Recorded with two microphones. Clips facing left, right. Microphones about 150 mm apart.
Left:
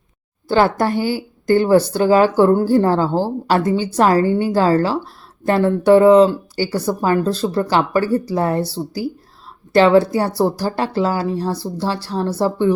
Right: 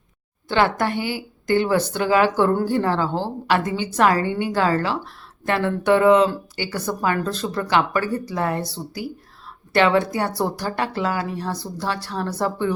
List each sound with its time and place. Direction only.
0.4 s speech: 35° left (ahead or behind)